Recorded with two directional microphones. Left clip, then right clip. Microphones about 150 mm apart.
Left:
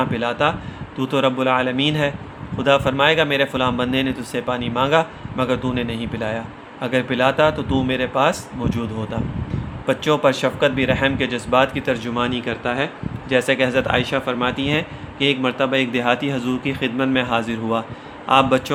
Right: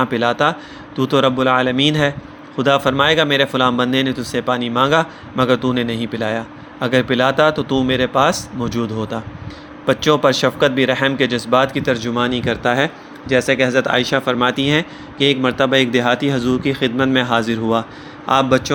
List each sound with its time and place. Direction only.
0.0 s speech: 40° right (ahead or behind)
13.2 s a man's voice: 25° right (ahead or behind)